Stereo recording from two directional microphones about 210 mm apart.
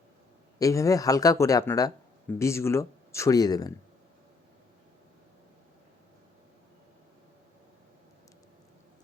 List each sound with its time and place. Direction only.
0.6 s speech: 15° left (ahead or behind)